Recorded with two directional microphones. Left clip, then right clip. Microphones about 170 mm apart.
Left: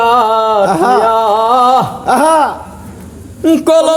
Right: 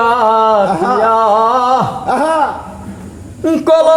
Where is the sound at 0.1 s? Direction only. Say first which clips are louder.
Even; 15° left (ahead or behind).